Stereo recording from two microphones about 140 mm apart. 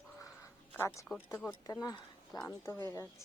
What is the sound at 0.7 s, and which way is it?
Speech, 20° left (ahead or behind).